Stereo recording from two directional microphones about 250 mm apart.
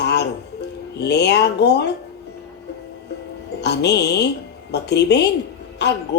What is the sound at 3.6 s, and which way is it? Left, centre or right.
Speech, left.